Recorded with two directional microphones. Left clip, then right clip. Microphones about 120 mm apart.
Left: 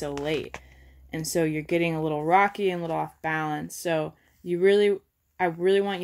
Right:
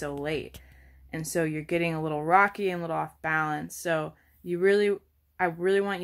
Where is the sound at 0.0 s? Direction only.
15° left (ahead or behind).